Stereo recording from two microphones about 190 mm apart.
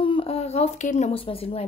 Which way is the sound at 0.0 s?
30° left (ahead or behind).